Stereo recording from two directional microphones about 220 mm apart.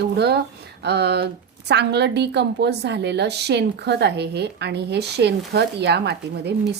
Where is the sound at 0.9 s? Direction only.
50° right (ahead or behind).